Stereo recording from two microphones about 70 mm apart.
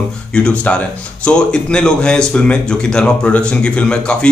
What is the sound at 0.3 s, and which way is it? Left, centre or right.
Speech, centre.